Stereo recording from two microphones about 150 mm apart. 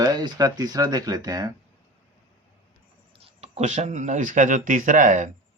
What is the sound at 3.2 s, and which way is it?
Speech, 45° right (ahead or behind).